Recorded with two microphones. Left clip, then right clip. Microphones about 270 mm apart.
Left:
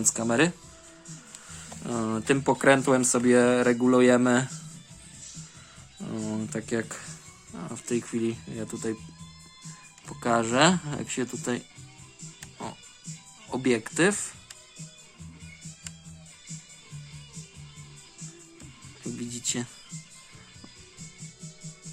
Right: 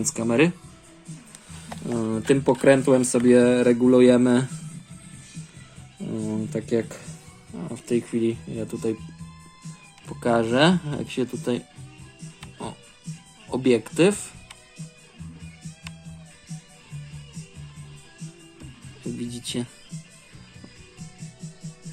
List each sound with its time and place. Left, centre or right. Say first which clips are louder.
0.0 s speech: right 3 dB; centre
1.9 s speech: right 4 dB; centre
6.1 s a sound: right 4 dB; centre
6.5 s speech: right 7 dB; centre
10.1 s speech: right 3 dB; centre
13.5 s speech: right 5 dB; centre
19.0 s music: right 1 dB; centre